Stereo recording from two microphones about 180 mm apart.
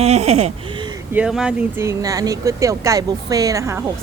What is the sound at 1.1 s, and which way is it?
Speech, 5° right (ahead or behind).